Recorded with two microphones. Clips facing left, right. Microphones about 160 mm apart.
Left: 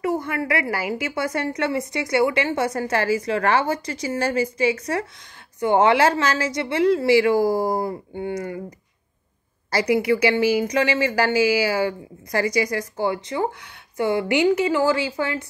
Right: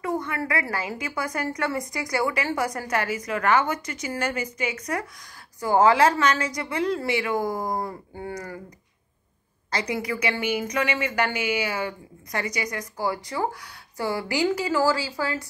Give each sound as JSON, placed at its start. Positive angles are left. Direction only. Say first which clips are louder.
{"t": 0.0, "sound": "a woman's voice", "louder": "left 4 dB", "side_deg": 30}
{"t": 9.8, "sound": "a woman's voice", "louder": "left 9 dB", "side_deg": 30}